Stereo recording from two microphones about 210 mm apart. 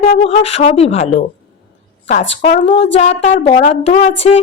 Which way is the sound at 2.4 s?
30° left (ahead or behind).